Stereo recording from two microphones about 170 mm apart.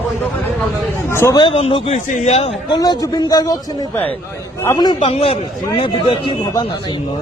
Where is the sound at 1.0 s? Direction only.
15° left (ahead or behind).